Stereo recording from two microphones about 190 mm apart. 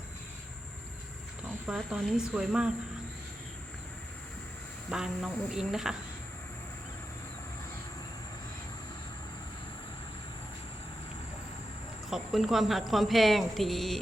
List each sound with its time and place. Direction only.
1.6 s a woman's voice: centre (ahead or behind)
4.9 s a woman's voice: 5° right (ahead or behind)
12.1 s a woman's voice: centre (ahead or behind)